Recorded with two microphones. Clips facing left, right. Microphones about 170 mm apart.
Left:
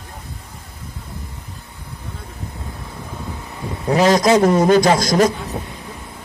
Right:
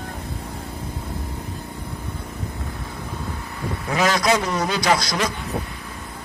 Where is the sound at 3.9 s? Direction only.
35° left (ahead or behind).